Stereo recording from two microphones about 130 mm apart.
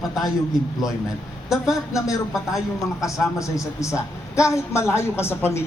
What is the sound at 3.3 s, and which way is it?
Speech, 25° left (ahead or behind).